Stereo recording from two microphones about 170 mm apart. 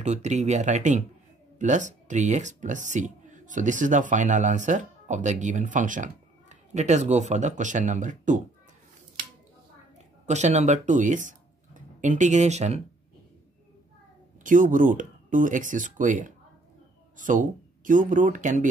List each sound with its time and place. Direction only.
0.0 s speech: 40° right (ahead or behind)
10.2 s speech: 40° right (ahead or behind)
14.4 s speech: 50° right (ahead or behind)